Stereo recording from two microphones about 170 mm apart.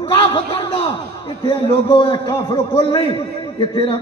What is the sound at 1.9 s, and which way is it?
A man's voice, 30° left (ahead or behind).